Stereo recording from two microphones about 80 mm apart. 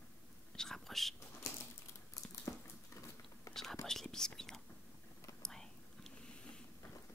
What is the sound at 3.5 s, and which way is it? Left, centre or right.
Whispering, left.